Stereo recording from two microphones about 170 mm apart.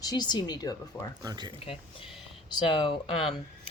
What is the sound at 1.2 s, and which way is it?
Speech, 25° right (ahead or behind).